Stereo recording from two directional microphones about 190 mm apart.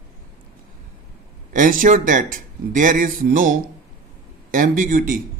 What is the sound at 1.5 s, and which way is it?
Speech, 45° right (ahead or behind).